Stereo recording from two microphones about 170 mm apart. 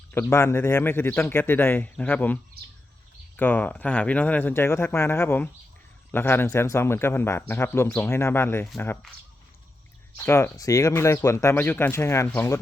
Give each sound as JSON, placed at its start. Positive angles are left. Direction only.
{"t": 0.1, "sound": "a man's voice", "side_deg": 15}
{"t": 10.2, "sound": "a man's voice", "side_deg": 15}